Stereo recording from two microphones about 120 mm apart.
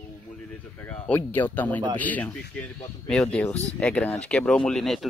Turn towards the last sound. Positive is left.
turn(degrees=0)  # may be behind; listen again after turning